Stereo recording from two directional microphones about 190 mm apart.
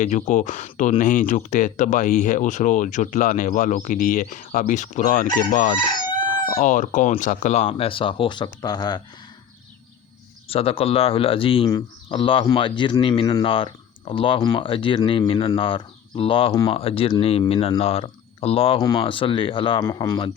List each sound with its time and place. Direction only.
0.0 s speech: 40° left (ahead or behind); by 9.0 s 20° left (ahead or behind)
10.5 s speech: 30° left (ahead or behind)